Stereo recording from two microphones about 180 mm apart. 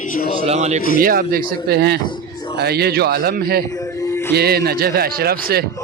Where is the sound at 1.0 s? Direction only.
55° right (ahead or behind).